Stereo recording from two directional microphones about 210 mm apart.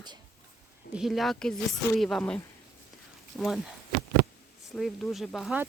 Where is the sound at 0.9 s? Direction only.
Centre (ahead or behind).